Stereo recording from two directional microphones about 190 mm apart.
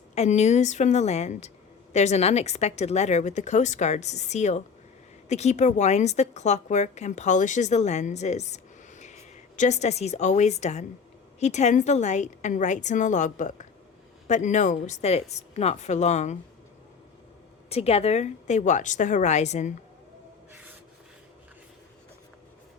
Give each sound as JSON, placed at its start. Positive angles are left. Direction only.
{"t": 0.1, "sound": "a woman's voice", "side_deg": 35}
{"t": 17.7, "sound": "a woman's voice", "side_deg": 30}